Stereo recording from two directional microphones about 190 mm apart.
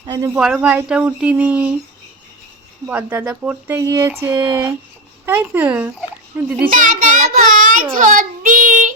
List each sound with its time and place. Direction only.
0.3 s speech: 5° right (ahead or behind)
2.8 s speech: 10° right (ahead or behind)
6.7 s a child's voice: 45° right (ahead or behind)